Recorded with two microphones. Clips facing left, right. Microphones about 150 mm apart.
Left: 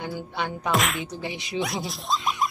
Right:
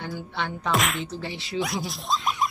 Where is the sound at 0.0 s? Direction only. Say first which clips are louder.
Left 1 dB; 15° left (ahead or behind).